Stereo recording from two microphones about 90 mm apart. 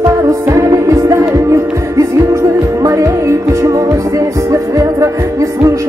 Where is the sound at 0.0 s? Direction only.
35° right (ahead or behind).